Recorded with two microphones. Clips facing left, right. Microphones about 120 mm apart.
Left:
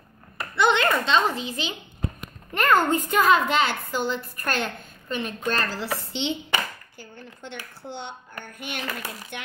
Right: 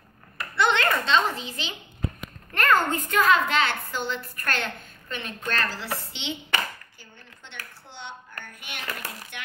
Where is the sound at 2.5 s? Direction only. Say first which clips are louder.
Left 1 dB; 10° left (ahead or behind).